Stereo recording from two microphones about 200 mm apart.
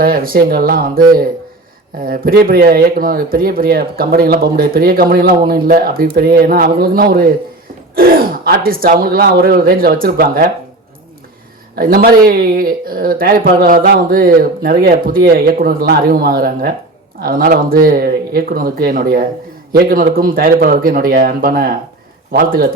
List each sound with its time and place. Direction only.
0.0 s speech: 45° right (ahead or behind)
11.7 s speech: 45° right (ahead or behind)